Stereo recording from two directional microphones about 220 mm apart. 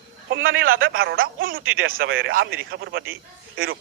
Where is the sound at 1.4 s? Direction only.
40° right (ahead or behind).